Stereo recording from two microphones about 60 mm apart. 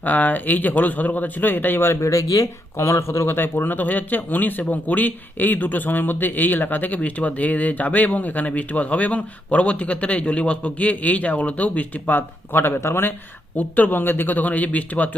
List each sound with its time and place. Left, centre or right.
0.0 s a man's voice: left
13.6 s a man's voice: left